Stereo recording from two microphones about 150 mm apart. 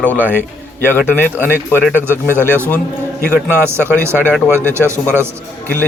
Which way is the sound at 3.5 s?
15° right (ahead or behind).